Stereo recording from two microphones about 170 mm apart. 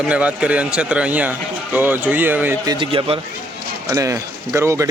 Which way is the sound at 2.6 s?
30° right (ahead or behind).